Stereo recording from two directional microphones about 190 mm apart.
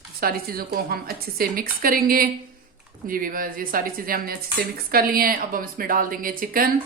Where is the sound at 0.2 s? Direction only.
50° right (ahead or behind).